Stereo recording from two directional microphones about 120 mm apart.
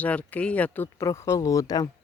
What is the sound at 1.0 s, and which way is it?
Speech, 25° left (ahead or behind).